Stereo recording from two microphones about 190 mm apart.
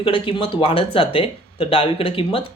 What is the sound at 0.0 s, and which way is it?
Speech, 25° left (ahead or behind).